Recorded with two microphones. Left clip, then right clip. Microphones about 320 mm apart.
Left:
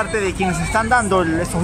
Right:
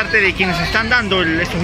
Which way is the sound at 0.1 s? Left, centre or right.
Centre.